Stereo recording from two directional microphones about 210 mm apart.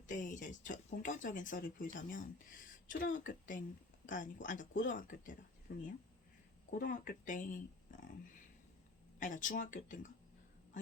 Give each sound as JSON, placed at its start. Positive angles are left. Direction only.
{"t": 0.1, "sound": "speech", "side_deg": 35}
{"t": 5.7, "sound": "speech", "side_deg": 60}
{"t": 6.7, "sound": "speech", "side_deg": 40}
{"t": 9.1, "sound": "speech", "side_deg": 40}